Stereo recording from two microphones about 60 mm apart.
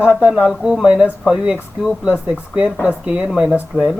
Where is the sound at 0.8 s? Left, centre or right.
Centre.